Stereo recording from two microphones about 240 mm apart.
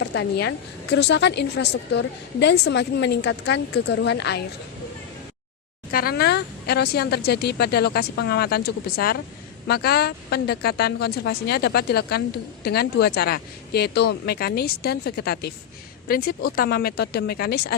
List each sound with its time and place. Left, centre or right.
0.0 s a woman's voice: left
5.9 s speech: left